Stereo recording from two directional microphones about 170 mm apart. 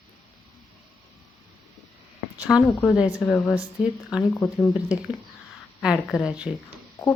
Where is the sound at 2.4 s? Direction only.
5° right (ahead or behind).